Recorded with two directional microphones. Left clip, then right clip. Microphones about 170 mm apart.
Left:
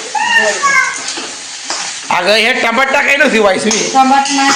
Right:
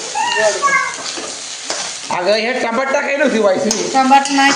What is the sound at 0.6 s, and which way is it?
Speech, 40° left (ahead or behind).